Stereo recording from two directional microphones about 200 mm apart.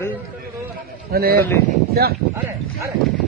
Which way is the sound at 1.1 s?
50° right (ahead or behind).